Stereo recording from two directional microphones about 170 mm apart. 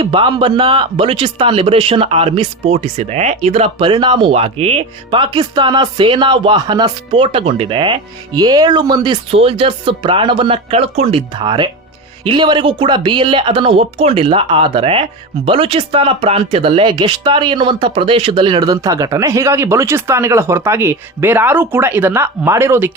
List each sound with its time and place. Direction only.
0.0 s speech: 30° right (ahead or behind); by 22.9 s 15° right (ahead or behind)